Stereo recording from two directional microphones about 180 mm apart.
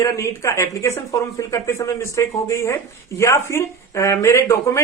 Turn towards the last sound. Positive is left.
turn(degrees=15)  # may be behind; listen again after turning